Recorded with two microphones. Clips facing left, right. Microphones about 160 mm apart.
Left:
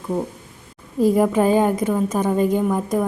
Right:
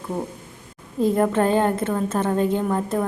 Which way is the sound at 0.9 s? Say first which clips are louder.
Left 3 dB; 10° left (ahead or behind).